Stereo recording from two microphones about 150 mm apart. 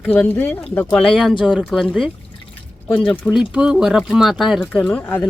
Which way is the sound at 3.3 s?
5° right (ahead or behind).